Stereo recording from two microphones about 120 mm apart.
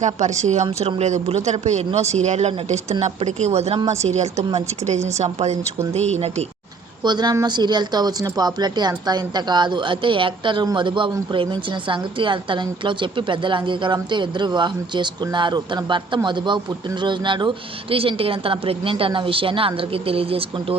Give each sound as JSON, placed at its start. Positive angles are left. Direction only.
{"t": 0.0, "sound": "a woman's voice", "side_deg": -80}
{"t": 7.0, "sound": "a woman's voice", "side_deg": -35}